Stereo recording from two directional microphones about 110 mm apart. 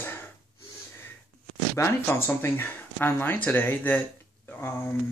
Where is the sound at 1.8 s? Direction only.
20° left (ahead or behind).